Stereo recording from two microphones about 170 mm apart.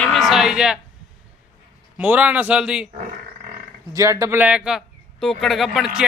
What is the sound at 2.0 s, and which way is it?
Speech, 10° right (ahead or behind).